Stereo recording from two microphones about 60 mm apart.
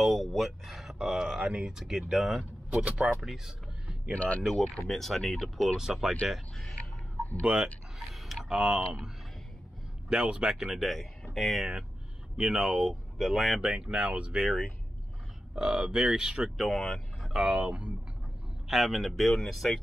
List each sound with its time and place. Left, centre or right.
0.0 s speech: centre
2.8 s speech: centre
3.2 s speech: centre
4.1 s speech: left
4.4 s speech: centre
5.8 s speech: centre
7.5 s speech: centre
8.1 s speech: centre
13.6 s speech: centre
15.5 s speech: centre
16.5 s speech: centre
17.5 s speech: centre
18.7 s speech: centre